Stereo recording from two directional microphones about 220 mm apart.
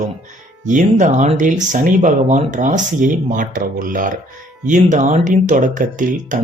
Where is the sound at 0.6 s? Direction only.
35° right (ahead or behind).